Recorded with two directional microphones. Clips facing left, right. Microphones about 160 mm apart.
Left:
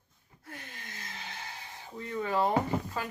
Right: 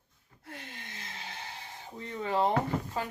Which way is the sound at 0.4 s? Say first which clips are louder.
Right 1 dB; 25° right (ahead or behind).